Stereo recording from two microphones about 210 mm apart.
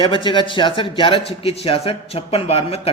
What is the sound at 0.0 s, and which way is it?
A man's voice, 25° left (ahead or behind).